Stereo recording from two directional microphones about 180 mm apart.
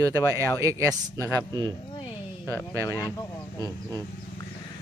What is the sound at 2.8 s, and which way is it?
Speech, 15° left (ahead or behind).